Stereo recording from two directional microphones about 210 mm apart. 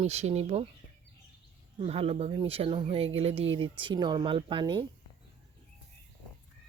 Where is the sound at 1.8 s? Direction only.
30° right (ahead or behind).